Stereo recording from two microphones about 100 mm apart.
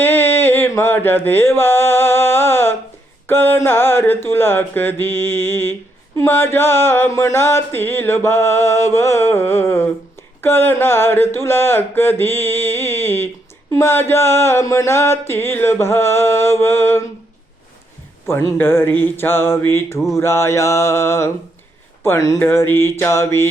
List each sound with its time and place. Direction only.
0.0 s a sound: 20° left (ahead or behind)
3.2 s music: 20° left (ahead or behind)
18.3 s music: 25° left (ahead or behind)
22.0 s speech: 25° left (ahead or behind)
22.4 s music: 20° left (ahead or behind)